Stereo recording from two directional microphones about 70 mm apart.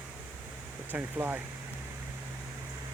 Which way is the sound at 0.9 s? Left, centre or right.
Right.